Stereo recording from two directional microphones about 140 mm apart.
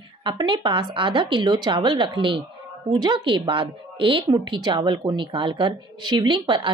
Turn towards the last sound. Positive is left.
turn(degrees=-35)  # may be behind; listen again after turning